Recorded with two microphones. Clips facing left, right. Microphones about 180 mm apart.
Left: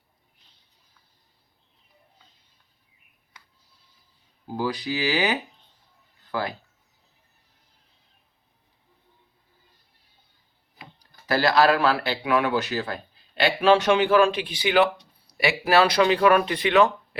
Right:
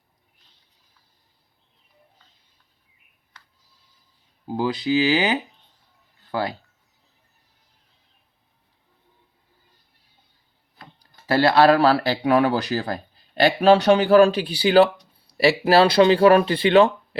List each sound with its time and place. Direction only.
4.4 s speech: 20° right (ahead or behind)
11.3 s speech: 30° right (ahead or behind)